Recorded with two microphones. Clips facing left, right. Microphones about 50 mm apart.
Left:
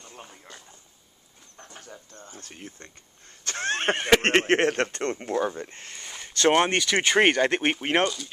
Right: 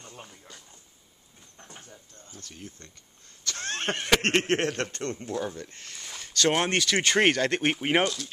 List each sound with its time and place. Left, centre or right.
0.3 s speech: left
1.9 s speech: left
3.4 s a sound: left
4.6 s speech: left
5.3 s speech: centre
6.0 s a sound: centre
6.5 s speech: centre